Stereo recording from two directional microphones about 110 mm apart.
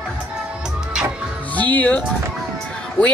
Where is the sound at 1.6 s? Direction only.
15° left (ahead or behind).